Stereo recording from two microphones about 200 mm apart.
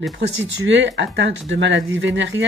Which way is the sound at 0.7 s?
65° right (ahead or behind).